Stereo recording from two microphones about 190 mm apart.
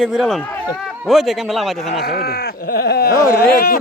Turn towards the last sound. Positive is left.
turn(degrees=50)  # may be behind; listen again after turning